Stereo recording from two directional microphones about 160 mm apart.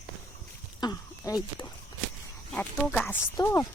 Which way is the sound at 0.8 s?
20° left (ahead or behind).